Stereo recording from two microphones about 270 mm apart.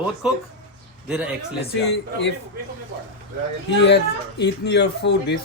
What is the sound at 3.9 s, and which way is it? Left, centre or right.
Speech, left.